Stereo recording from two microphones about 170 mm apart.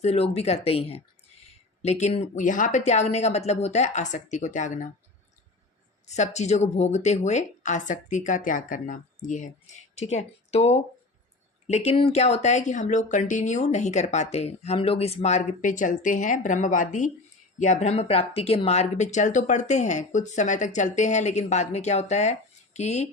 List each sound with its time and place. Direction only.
0.0 s speech: 40° left (ahead or behind)
6.1 s speech: 40° left (ahead or behind)